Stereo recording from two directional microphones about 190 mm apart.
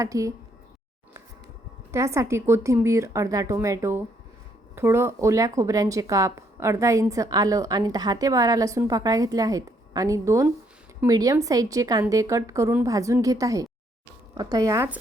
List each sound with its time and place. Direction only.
0.0 s speech: 15° right (ahead or behind)
1.9 s speech: 15° right (ahead or behind)